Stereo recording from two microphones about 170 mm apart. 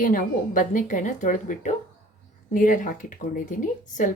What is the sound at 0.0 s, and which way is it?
A woman's voice, 50° left (ahead or behind).